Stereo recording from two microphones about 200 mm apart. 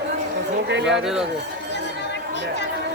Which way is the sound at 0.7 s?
60° right (ahead or behind).